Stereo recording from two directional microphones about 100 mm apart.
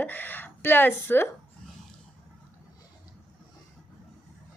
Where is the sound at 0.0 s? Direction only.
20° left (ahead or behind).